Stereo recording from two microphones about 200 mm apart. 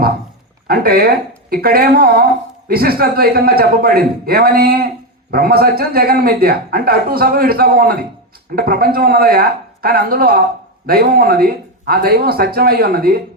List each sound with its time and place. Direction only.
0.7 s speech: 50° right (ahead or behind)